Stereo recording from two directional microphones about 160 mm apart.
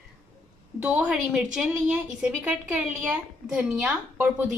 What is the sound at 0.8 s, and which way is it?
A woman's voice, 10° right (ahead or behind).